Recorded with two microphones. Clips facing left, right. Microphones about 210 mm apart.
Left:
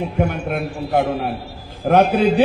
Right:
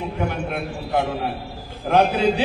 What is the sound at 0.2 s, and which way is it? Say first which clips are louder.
A man's voice: left 5 dB; 50° left (ahead or behind).